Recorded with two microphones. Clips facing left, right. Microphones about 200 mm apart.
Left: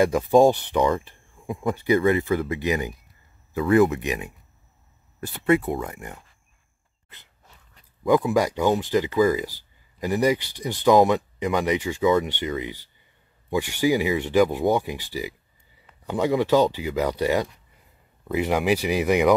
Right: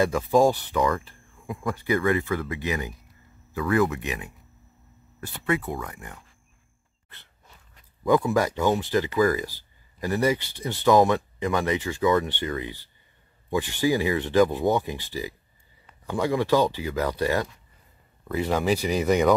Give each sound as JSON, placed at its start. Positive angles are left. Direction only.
{"t": 0.0, "sound": "speech", "side_deg": 15}
{"t": 5.5, "sound": "speech", "side_deg": 25}
{"t": 8.1, "sound": "speech", "side_deg": 15}